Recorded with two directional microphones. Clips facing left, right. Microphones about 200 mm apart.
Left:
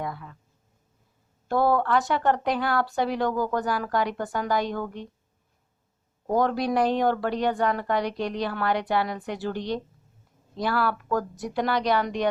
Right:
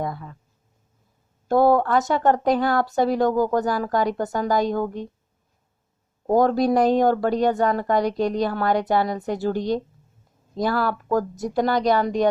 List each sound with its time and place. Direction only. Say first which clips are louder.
0.0 s a sound: right 5 dB; 40° right (ahead or behind)
1.5 s speech: right 5 dB; 45° right (ahead or behind)
6.2 s speech: right 6 dB; 40° right (ahead or behind)